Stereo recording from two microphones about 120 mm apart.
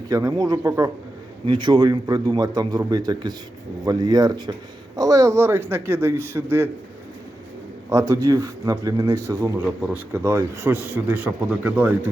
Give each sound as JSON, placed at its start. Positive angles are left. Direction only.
{"t": 0.1, "sound": "a man's voice", "side_deg": -30}
{"t": 1.5, "sound": "a man's voice", "side_deg": -40}
{"t": 7.9, "sound": "a man's voice", "side_deg": -25}
{"t": 9.6, "sound": "speech", "side_deg": -10}